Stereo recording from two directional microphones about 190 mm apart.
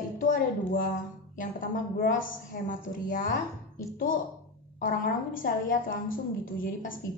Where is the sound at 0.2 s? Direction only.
45° left (ahead or behind).